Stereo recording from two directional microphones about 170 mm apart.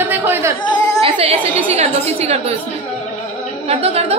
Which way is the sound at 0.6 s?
25° left (ahead or behind).